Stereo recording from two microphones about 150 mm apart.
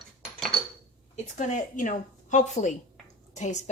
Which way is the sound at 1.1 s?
55° left (ahead or behind).